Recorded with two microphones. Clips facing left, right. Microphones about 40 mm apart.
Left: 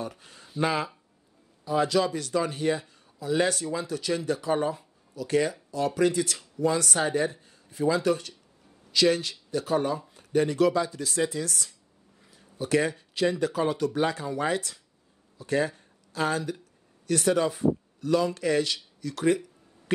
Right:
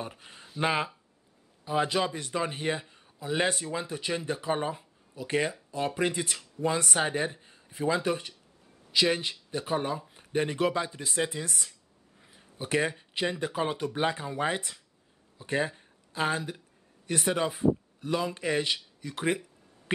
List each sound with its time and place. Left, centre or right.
0.0 s a man's voice: right